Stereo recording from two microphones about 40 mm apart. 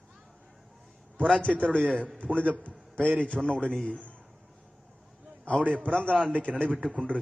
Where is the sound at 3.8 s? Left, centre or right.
Left.